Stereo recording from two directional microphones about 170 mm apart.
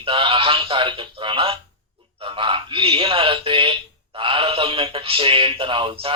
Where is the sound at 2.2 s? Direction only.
30° right (ahead or behind).